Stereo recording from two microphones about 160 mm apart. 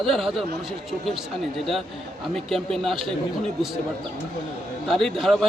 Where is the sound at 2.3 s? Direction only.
Centre (ahead or behind).